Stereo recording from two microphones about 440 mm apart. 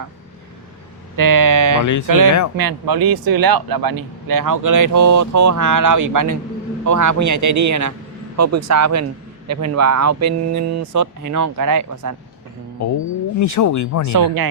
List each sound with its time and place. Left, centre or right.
1.1 s a sound: right
1.8 s speech: left
2.0 s speech: right
13.4 s speech: left
14.1 s speech: right